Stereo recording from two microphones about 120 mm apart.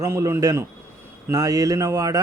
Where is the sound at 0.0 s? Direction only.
25° right (ahead or behind).